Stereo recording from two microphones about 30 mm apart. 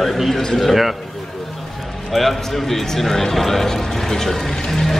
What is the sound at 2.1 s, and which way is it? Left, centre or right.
Speech, centre.